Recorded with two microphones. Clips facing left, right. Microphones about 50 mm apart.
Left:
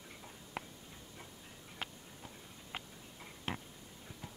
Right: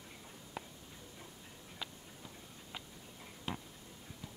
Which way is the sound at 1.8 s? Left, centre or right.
Left.